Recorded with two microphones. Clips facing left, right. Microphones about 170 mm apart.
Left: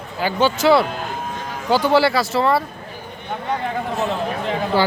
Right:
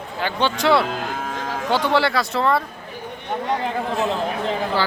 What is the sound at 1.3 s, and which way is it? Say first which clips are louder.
Music: right 2 dB; 90° right.